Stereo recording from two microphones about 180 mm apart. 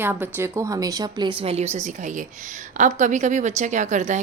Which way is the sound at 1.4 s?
35° right (ahead or behind).